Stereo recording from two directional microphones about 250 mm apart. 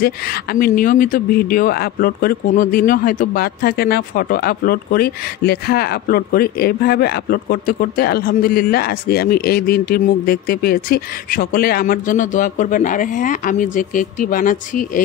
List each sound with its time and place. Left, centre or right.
0.0 s speech: left